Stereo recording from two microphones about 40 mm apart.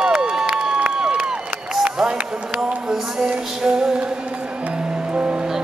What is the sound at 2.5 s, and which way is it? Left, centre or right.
Music, centre.